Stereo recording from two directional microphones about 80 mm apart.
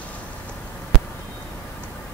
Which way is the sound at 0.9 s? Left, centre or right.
Centre.